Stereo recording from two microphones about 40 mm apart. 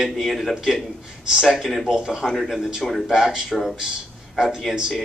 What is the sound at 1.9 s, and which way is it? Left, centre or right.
Speech, centre.